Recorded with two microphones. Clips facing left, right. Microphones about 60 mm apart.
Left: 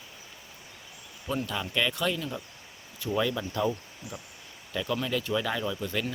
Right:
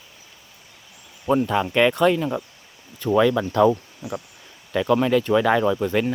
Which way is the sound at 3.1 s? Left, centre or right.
Right.